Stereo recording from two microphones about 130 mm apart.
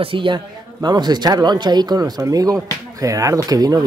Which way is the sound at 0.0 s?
40° right (ahead or behind).